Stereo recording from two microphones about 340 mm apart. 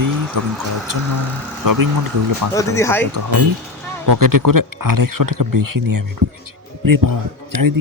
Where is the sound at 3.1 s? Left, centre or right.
Right.